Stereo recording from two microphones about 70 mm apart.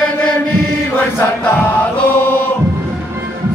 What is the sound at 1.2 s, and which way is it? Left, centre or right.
Chant, left.